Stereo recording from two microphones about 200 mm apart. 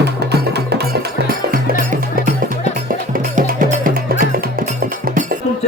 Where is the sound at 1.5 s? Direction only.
40° right (ahead or behind).